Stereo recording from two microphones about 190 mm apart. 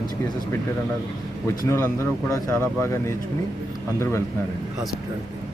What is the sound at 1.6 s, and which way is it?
Speech, 15° left (ahead or behind).